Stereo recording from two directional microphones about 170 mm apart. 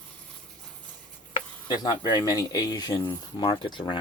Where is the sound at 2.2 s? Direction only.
20° left (ahead or behind).